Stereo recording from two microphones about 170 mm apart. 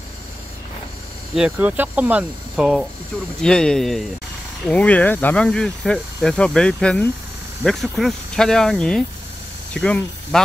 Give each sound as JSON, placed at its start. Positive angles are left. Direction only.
{"t": 1.3, "sound": "speech", "side_deg": -5}